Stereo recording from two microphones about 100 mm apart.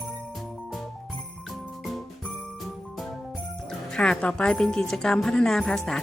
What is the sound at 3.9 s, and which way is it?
A woman's voice, 10° left (ahead or behind).